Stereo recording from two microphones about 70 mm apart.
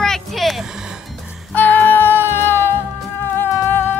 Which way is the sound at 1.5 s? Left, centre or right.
Left.